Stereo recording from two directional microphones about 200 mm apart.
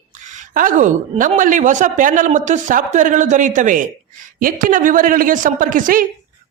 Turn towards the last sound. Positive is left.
turn(degrees=-40)  # may be behind; listen again after turning